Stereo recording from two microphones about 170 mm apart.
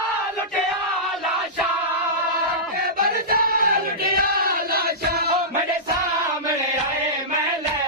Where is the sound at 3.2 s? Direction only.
60° right (ahead or behind).